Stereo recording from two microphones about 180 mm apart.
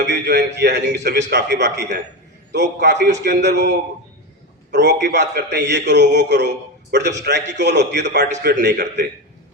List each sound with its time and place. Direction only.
0.1 s a man's voice: 65° right (ahead or behind)